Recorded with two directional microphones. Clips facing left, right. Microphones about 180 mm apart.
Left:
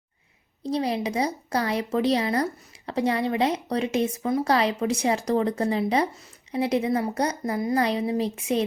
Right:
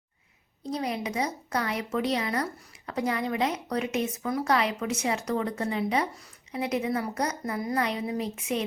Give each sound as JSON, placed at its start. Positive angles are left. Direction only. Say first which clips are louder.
{"t": 0.6, "sound": "speech", "louder": "left 5 dB", "side_deg": 30}